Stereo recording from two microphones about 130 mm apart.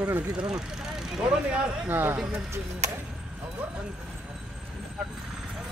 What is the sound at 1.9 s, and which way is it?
Speech, 15° right (ahead or behind).